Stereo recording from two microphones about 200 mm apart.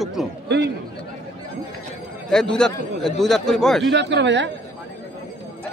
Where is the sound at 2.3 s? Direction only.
5° left (ahead or behind).